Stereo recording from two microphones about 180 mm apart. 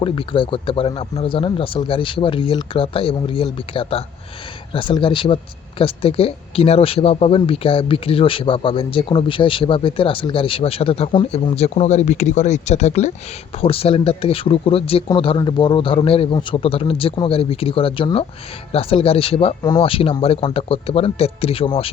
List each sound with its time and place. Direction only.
0.0 s speech: 30° left (ahead or behind)